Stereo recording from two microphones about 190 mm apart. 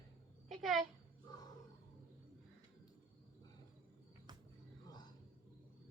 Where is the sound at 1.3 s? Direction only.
20° left (ahead or behind).